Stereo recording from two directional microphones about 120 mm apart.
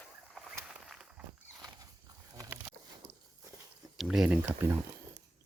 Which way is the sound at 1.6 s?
30° right (ahead or behind).